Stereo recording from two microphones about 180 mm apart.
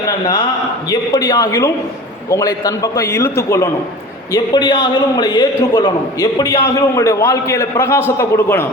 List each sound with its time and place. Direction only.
0.9 s a man's voice: 20° left (ahead or behind)